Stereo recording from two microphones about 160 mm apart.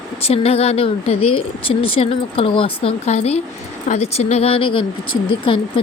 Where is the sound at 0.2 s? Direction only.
40° left (ahead or behind).